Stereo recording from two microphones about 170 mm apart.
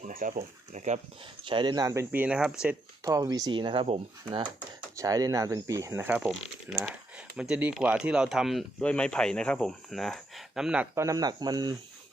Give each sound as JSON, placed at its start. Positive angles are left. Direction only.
{"t": 0.1, "sound": "speech", "side_deg": -50}
{"t": 1.5, "sound": "speech", "side_deg": -25}
{"t": 3.0, "sound": "speech", "side_deg": -20}
{"t": 6.1, "sound": "speech", "side_deg": -5}
{"t": 10.9, "sound": "speech", "side_deg": -20}